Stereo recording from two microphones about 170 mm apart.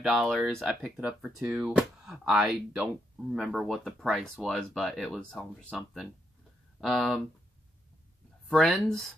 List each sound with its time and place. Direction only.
0.0 s speech: centre (ahead or behind)
8.5 s speech: centre (ahead or behind)